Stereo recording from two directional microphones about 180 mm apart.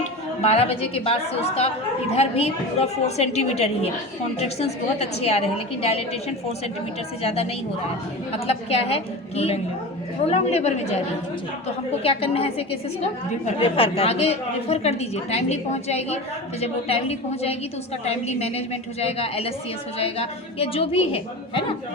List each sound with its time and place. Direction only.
0.4 s a woman's voice: 35° left (ahead or behind)
7.2 s a woman's voice: 35° left (ahead or behind)
8.4 s a woman's voice: 35° left (ahead or behind)
12.0 s a woman's voice: 35° left (ahead or behind)